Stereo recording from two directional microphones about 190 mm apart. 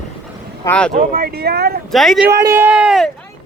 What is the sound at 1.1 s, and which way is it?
Speech, 55° right (ahead or behind).